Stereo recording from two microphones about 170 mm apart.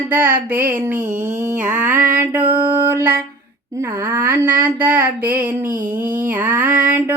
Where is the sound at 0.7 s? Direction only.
10° right (ahead or behind).